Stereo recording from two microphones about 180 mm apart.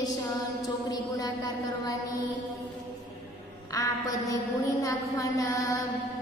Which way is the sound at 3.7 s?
20° left (ahead or behind).